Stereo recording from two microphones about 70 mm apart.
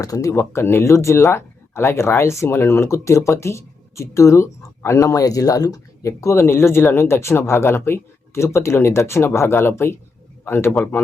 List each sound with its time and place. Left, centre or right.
0.0 s speech: left
0.3 s speech: left
6.0 s speech: left